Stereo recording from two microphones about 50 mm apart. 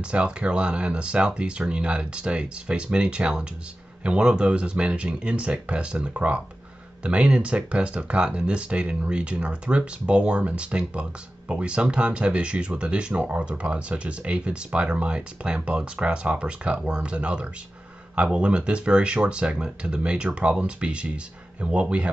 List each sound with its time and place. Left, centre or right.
0.0 s speech: right